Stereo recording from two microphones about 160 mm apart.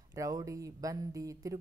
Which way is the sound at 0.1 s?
20° right (ahead or behind).